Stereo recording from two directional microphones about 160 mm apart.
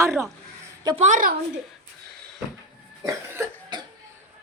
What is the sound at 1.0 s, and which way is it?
Speech, 55° right (ahead or behind).